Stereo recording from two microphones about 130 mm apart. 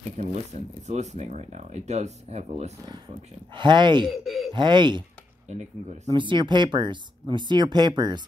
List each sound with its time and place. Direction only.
0.2 s speech: 60° right (ahead or behind)
3.5 s speech: 35° right (ahead or behind)
4.2 s speech: centre (ahead or behind)
4.5 s speech: 35° right (ahead or behind)
6.1 s speech: 40° right (ahead or behind)